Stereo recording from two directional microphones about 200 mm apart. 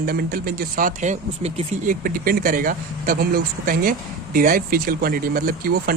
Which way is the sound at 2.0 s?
45° right (ahead or behind).